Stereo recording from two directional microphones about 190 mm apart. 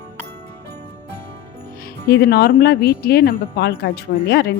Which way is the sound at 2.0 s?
55° left (ahead or behind).